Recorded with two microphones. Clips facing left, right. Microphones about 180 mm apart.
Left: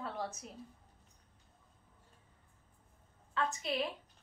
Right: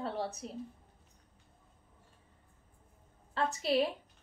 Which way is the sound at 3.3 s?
35° right (ahead or behind).